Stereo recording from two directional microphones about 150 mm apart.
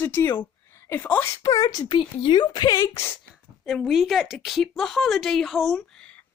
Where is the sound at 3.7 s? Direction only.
Centre (ahead or behind).